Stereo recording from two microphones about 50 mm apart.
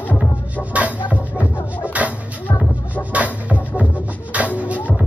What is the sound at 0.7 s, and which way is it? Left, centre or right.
Music, right.